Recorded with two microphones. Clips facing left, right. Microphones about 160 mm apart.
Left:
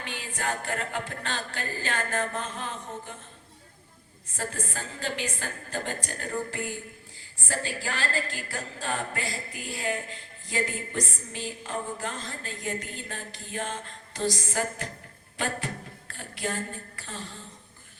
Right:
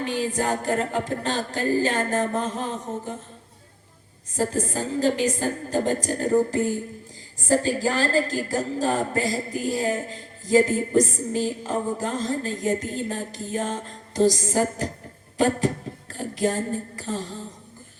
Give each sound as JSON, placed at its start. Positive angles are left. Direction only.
{"t": 0.0, "sound": "a woman's voice", "side_deg": -40}
{"t": 4.4, "sound": "a woman's voice", "side_deg": -40}